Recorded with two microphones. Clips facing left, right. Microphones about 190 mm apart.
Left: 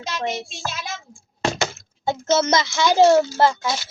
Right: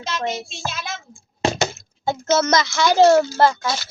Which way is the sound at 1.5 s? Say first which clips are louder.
Right 2 dB; 15° right (ahead or behind).